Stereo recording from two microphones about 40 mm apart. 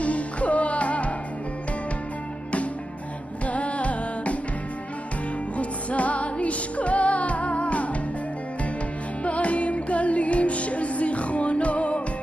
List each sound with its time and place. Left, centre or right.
0.0 s music: left
3.4 s music: left
5.6 s music: left
9.2 s music: left